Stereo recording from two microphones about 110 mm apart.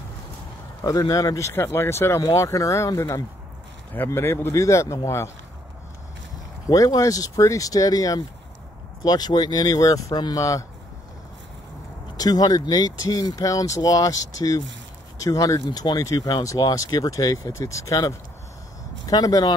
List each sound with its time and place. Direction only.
0.8 s speech: 30° left (ahead or behind)
3.9 s speech: 20° left (ahead or behind)
6.7 s speech: 30° left (ahead or behind)
12.2 s speech: 35° left (ahead or behind)